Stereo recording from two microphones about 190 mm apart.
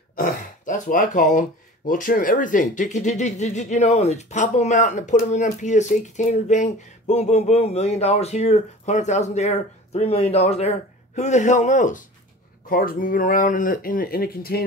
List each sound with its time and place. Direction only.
0.1 s grunt: 45° left (ahead or behind)
1.9 s speech: 45° left (ahead or behind)